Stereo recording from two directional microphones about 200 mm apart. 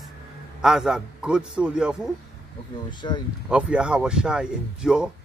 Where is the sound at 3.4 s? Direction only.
5° right (ahead or behind).